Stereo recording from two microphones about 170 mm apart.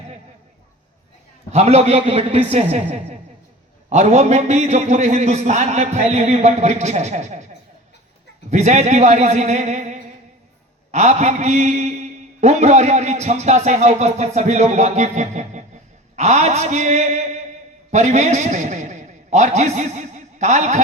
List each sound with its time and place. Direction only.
1.5 s a man's voice: 40° right (ahead or behind)
8.4 s a man's voice: 40° right (ahead or behind)